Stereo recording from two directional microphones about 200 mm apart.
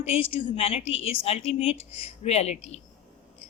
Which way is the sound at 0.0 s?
30° left (ahead or behind).